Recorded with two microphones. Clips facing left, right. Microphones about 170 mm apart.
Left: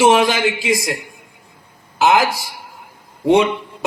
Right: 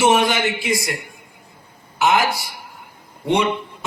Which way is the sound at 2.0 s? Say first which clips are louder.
Left 3 dB; 90° left.